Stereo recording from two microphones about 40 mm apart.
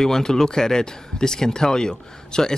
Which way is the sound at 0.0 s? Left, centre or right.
Centre.